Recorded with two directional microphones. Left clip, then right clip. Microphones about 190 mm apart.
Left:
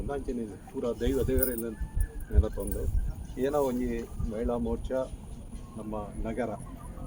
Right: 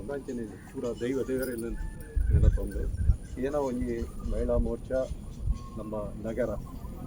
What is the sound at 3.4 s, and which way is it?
Speech, 45° left (ahead or behind).